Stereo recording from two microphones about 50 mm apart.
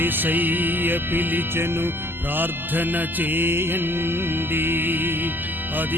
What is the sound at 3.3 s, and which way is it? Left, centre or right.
Music, right.